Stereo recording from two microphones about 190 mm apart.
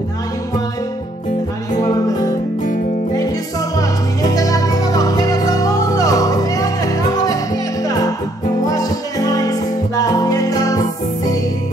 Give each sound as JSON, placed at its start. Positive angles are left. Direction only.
{"t": 3.7, "sound": "music", "side_deg": 20}
{"t": 8.6, "sound": "music", "side_deg": 20}